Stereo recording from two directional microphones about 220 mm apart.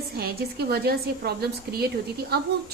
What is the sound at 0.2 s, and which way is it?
A woman's voice, 45° right (ahead or behind).